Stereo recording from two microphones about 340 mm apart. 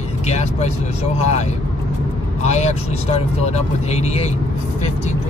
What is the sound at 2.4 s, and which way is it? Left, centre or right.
Speech, centre.